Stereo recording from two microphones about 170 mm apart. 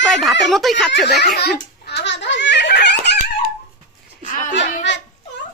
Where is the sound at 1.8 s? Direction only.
80° left.